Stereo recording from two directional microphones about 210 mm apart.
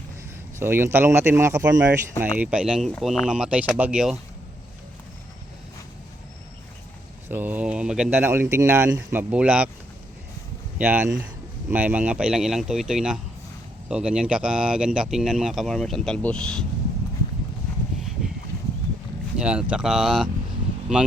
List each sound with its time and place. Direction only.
0.6 s speech: 10° right (ahead or behind)
7.3 s speech: 10° right (ahead or behind)
10.8 s speech: 5° right (ahead or behind)
19.4 s speech: 5° right (ahead or behind)